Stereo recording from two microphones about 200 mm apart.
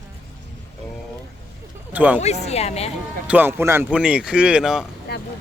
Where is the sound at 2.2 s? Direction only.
35° left (ahead or behind).